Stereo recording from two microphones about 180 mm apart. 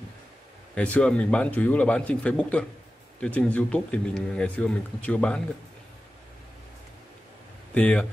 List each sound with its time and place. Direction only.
0.7 s speech: 5° left (ahead or behind)
7.7 s speech: 5° left (ahead or behind)